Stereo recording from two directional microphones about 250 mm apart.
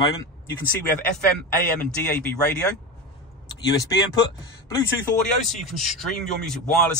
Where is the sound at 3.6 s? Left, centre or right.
Centre.